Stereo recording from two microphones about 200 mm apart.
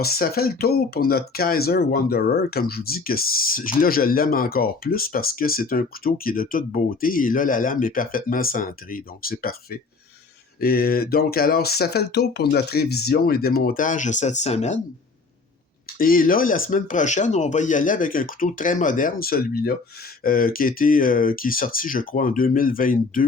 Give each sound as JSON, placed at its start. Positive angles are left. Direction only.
{"t": 0.0, "sound": "speech", "side_deg": 50}
{"t": 16.0, "sound": "speech", "side_deg": 45}